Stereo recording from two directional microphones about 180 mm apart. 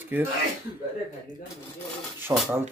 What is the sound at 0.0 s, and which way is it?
Speech, 10° right (ahead or behind).